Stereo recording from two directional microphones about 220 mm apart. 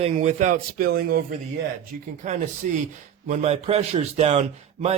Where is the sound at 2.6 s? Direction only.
35° right (ahead or behind).